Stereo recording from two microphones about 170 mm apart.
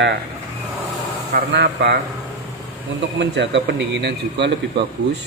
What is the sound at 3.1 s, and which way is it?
A man's voice, 90° right.